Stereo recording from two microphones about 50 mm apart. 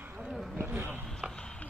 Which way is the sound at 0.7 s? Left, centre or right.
Right.